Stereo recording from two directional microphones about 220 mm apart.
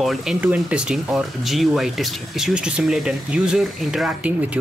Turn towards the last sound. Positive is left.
turn(degrees=-5)  # may be behind; listen again after turning